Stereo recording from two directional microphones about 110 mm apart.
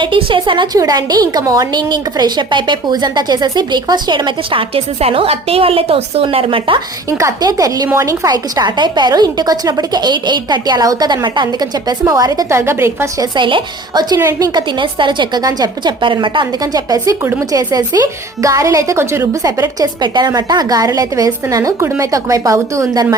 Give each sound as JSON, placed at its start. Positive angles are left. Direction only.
{"t": 0.0, "sound": "a woman's voice", "side_deg": -50}
{"t": 7.1, "sound": "speech", "side_deg": -25}
{"t": 13.3, "sound": "a woman's voice", "side_deg": -45}
{"t": 16.7, "sound": "speech", "side_deg": -35}